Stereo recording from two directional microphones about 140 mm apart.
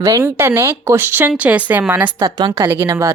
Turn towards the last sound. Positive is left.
turn(degrees=-20)  # may be behind; listen again after turning